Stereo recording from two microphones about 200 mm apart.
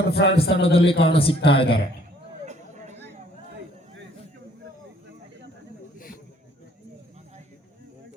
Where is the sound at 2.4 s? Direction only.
35° right (ahead or behind).